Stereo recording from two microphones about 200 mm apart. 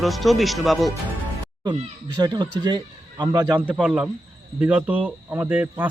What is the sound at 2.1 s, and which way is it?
A man's voice, 20° right (ahead or behind).